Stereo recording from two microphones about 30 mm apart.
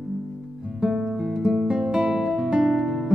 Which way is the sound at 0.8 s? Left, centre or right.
Centre.